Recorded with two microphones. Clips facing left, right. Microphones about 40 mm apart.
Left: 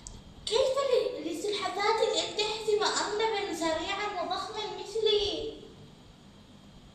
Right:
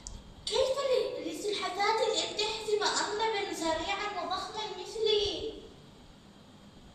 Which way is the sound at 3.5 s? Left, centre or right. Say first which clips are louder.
Left 1 dB; left.